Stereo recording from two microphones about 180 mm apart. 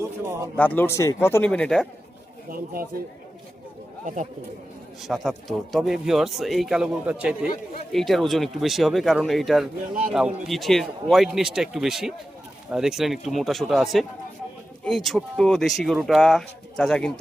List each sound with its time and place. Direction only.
0.0 s speech: 15° right (ahead or behind)
0.5 s speech: 10° left (ahead or behind)
4.0 s speech: 45° right (ahead or behind)
5.0 s speech: centre (ahead or behind)